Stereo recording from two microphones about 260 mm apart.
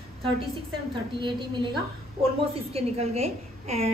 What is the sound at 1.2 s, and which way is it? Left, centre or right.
A woman's voice, centre.